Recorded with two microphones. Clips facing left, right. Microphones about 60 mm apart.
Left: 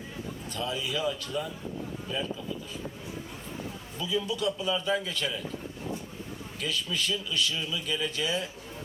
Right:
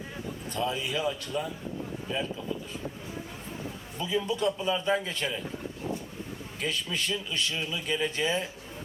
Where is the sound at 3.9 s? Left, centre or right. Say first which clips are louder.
Right 1 dB; right.